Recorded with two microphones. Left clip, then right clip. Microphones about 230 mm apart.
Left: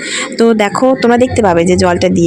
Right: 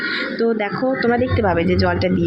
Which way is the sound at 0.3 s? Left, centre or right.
Left.